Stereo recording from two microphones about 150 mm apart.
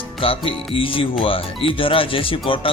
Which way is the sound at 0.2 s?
35° left (ahead or behind).